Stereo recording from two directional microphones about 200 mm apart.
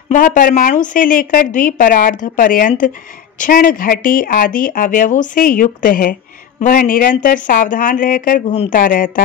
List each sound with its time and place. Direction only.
0.1 s speech: 40° left (ahead or behind)